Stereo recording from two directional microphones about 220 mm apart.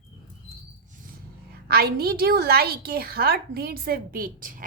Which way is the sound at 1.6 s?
45° right (ahead or behind).